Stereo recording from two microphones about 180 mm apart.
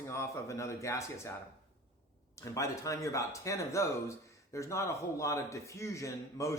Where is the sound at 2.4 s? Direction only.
15° left (ahead or behind).